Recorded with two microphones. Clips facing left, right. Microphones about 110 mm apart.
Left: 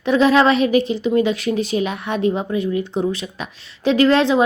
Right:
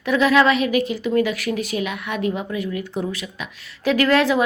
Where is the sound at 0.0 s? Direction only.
30° left (ahead or behind).